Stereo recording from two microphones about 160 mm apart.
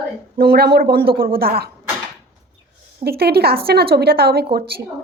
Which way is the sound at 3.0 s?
80° right.